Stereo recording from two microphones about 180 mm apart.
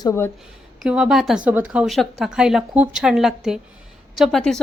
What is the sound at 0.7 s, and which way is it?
A woman's voice, 5° right (ahead or behind).